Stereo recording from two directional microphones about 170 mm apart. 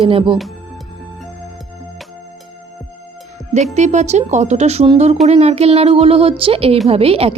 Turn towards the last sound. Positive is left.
turn(degrees=-35)  # may be behind; listen again after turning